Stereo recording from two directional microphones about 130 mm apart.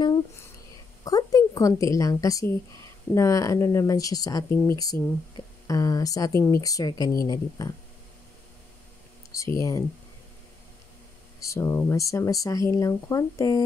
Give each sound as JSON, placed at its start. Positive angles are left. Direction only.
{"t": 1.0, "sound": "a woman's voice", "side_deg": 30}
{"t": 9.3, "sound": "speech", "side_deg": 25}
{"t": 11.4, "sound": "speech", "side_deg": 20}